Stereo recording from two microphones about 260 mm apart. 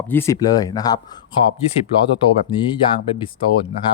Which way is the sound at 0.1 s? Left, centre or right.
Centre.